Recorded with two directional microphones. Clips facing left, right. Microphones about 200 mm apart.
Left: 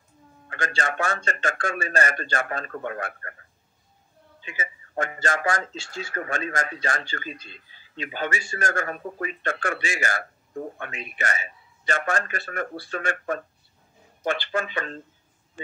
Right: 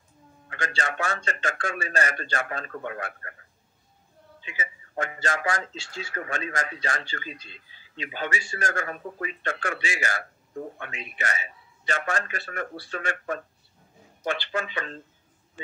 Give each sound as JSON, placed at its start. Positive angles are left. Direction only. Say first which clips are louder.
{"t": 0.5, "sound": "speech", "louder": "left 2 dB", "side_deg": 50}
{"t": 4.4, "sound": "speech", "louder": "left 2 dB", "side_deg": 50}